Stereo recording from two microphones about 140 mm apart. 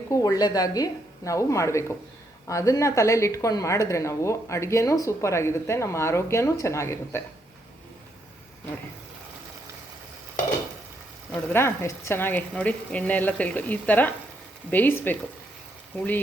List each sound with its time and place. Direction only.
0.1 s a woman's voice: 25° left (ahead or behind)
11.5 s speech: 20° left (ahead or behind)